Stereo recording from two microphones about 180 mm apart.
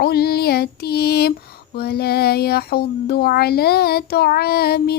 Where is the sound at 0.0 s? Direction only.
60° left (ahead or behind).